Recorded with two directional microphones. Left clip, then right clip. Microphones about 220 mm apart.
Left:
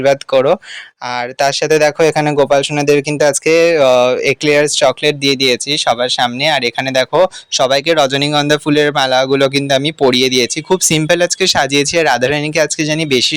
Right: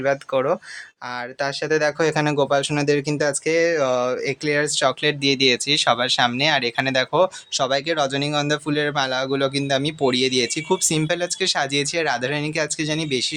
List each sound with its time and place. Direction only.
0.0 s speech: 35° left (ahead or behind)